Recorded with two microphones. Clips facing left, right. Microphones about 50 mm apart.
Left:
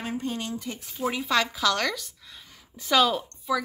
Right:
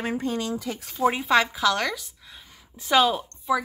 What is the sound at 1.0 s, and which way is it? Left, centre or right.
A woman's voice, right.